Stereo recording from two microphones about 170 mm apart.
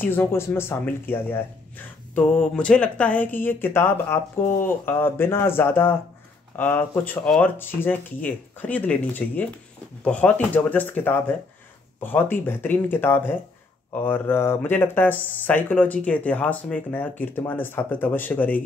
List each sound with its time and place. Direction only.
0.0 s speech: 10° left (ahead or behind)